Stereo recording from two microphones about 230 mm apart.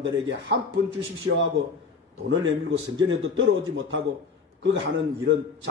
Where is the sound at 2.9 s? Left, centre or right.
Right.